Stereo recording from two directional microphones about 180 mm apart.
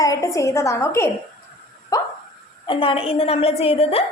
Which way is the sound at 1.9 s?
20° left (ahead or behind).